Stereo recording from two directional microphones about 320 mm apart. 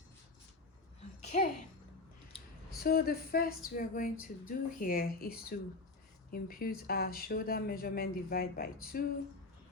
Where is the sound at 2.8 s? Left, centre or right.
Left.